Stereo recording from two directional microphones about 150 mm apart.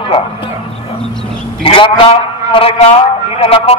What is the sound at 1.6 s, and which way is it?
A man's voice, 35° left (ahead or behind).